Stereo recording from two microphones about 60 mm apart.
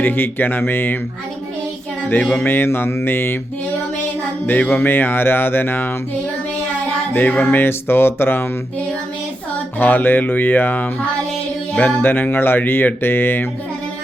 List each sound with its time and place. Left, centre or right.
0.0 s speech: left
2.4 s speech: left
4.7 s speech: left
7.1 s music: left
7.6 s speech: left
9.7 s speech: left